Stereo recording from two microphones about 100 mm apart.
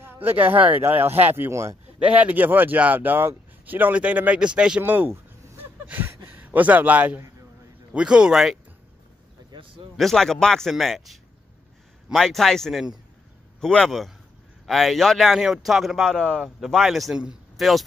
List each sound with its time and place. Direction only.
0.0 s speech: 20° right (ahead or behind)
2.0 s speech: 15° right (ahead or behind)
4.6 s a sound: 10° right (ahead or behind)
7.9 s speech: 10° right (ahead or behind)
9.5 s a sound: 60° right (ahead or behind)
9.9 s speech: 5° left (ahead or behind)
16.5 s speech: 5° right (ahead or behind)